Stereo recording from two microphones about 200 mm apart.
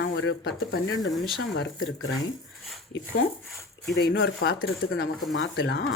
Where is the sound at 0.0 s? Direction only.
60° left (ahead or behind).